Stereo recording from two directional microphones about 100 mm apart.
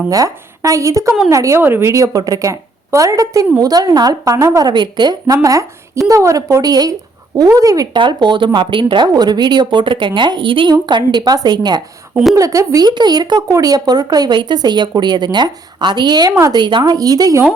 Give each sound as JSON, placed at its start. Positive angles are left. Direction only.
{"t": 0.1, "sound": "a woman's voice", "side_deg": -35}
{"t": 5.4, "sound": "a woman's voice", "side_deg": -35}
{"t": 7.9, "sound": "speech", "side_deg": -55}
{"t": 12.3, "sound": "a woman's voice", "side_deg": -35}
{"t": 12.9, "sound": "speech", "side_deg": -45}